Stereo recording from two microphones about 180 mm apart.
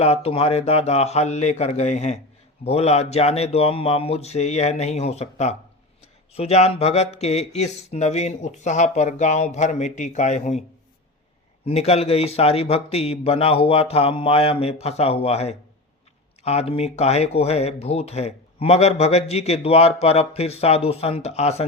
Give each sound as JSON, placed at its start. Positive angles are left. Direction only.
{"t": 0.0, "sound": "speech", "side_deg": 35}
{"t": 11.6, "sound": "speech", "side_deg": 35}